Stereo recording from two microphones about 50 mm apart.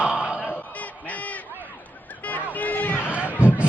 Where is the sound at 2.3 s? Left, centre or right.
Left.